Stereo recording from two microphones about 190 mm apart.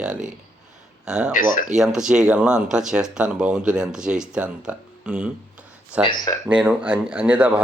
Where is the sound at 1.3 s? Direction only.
45° left (ahead or behind).